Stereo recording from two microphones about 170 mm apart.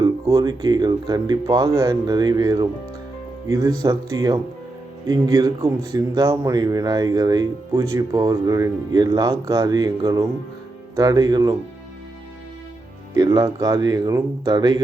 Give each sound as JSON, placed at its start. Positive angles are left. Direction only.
{"t": 0.0, "sound": "speech", "side_deg": -20}
{"t": 13.1, "sound": "speech", "side_deg": -25}